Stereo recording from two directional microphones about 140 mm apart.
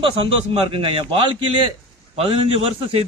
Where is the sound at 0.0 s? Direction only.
40° right (ahead or behind).